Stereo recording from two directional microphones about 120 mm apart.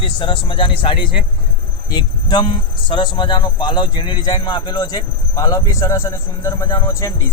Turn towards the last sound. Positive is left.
turn(degrees=25)  # may be behind; listen again after turning